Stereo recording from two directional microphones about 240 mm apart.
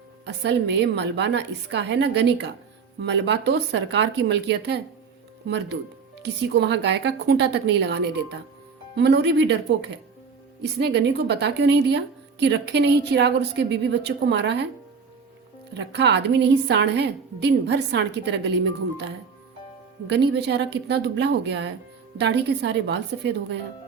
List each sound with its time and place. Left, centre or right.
0.4 s a woman's voice: right
15.7 s a woman's voice: right
20.1 s a woman's voice: right